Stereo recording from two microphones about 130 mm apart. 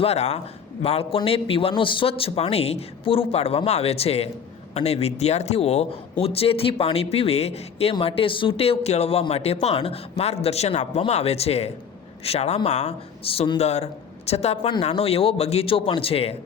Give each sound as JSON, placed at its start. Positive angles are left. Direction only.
{"t": 0.0, "sound": "a man's voice", "side_deg": 55}